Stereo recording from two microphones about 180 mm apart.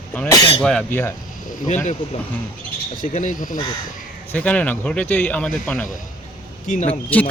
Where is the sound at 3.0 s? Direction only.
45° left (ahead or behind).